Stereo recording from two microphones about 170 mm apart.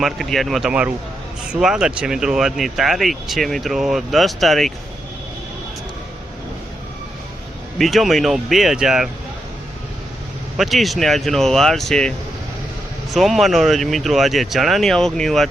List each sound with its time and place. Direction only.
0.0 s speech: centre (ahead or behind)
7.8 s speech: centre (ahead or behind)
10.6 s speech: centre (ahead or behind)
13.1 s speech: centre (ahead or behind)